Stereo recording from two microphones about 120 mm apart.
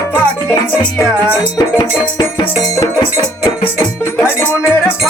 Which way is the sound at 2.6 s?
30° left (ahead or behind).